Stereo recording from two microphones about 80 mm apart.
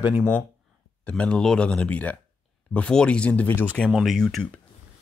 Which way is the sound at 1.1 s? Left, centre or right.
Centre.